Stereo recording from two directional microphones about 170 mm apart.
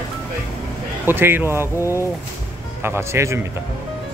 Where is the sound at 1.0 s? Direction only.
10° right (ahead or behind).